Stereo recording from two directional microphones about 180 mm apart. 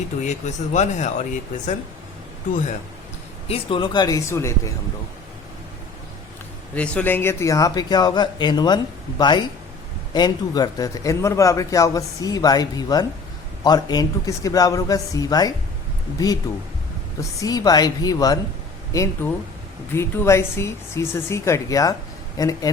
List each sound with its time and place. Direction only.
0.3 s speech: 40° left (ahead or behind)
3.5 s speech: 25° left (ahead or behind)
6.7 s speech: 5° left (ahead or behind)
19.9 s speech: 15° left (ahead or behind)